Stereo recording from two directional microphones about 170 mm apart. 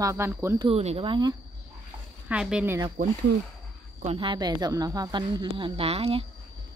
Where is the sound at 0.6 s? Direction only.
35° right (ahead or behind).